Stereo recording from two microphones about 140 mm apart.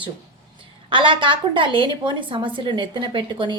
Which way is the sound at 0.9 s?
35° right (ahead or behind).